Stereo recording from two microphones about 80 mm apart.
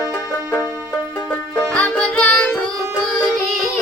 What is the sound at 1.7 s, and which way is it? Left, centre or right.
Music, centre.